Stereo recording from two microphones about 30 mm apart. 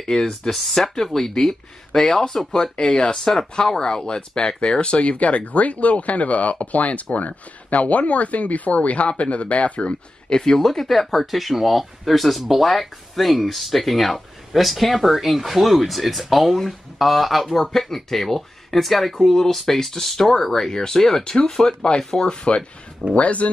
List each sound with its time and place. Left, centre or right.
0.0 s speech: left
0.6 s speech: centre
0.9 s speech: centre
1.5 s speech: left
10.3 s speech: left
21.2 s speech: left
23.1 s speech: left